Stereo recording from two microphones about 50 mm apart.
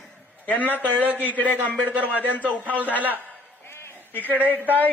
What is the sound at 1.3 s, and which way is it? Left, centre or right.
Speech, left.